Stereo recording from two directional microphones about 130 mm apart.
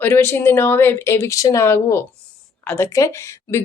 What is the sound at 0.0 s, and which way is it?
A woman's voice, 15° left (ahead or behind).